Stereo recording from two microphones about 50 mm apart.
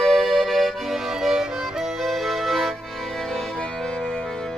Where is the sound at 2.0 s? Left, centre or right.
Centre.